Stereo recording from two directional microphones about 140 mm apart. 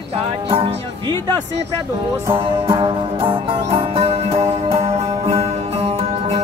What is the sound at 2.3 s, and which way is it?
Music, 35° right (ahead or behind).